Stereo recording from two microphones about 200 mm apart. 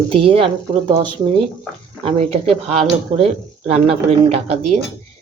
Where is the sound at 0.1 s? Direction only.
30° right (ahead or behind).